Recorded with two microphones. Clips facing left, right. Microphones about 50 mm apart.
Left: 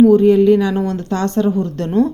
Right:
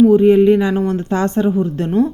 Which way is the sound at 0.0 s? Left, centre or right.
Centre.